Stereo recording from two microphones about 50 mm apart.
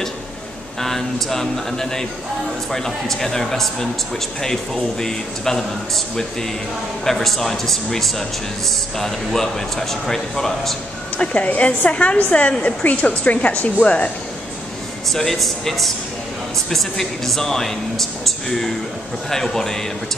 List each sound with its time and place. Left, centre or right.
0.7 s speech: centre
11.1 s a woman's voice: left
15.0 s speech: centre